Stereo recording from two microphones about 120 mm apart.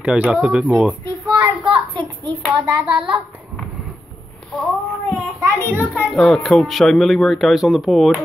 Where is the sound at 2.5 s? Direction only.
10° right (ahead or behind).